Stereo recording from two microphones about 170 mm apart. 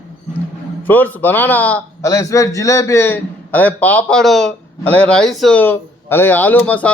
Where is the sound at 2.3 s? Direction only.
20° left (ahead or behind).